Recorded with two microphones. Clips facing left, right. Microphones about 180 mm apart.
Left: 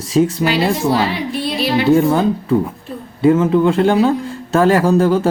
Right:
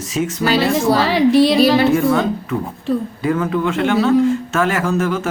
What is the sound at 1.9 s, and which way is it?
Speech, 35° left (ahead or behind).